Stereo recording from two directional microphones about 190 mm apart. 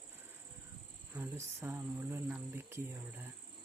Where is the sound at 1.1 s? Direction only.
15° right (ahead or behind).